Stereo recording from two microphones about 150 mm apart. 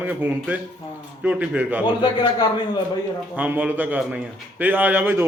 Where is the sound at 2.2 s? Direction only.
30° left (ahead or behind).